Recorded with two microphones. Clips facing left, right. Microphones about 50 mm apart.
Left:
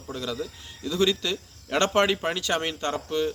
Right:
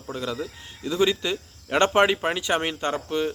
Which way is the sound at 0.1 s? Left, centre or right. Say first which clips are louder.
Right 2 dB; centre.